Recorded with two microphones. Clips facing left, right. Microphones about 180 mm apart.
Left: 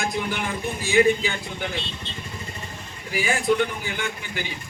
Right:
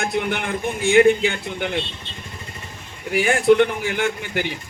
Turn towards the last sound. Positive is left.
turn(degrees=-60)  # may be behind; listen again after turning